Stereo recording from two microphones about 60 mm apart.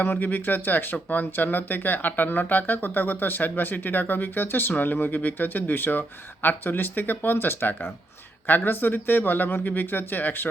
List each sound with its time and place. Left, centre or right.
0.0 s speech: left